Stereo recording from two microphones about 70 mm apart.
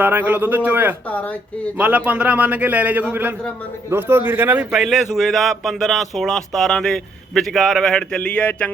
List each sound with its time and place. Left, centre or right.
0.0 s a man's voice: right
1.0 s speech: left
1.7 s a man's voice: right
4.7 s speech: centre